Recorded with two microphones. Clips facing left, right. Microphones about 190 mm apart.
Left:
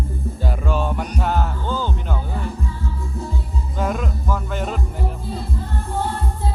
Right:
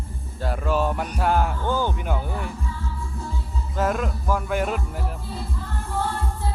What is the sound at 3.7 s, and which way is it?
Music, 5° right (ahead or behind).